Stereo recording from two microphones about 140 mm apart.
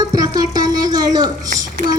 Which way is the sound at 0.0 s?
30° right (ahead or behind).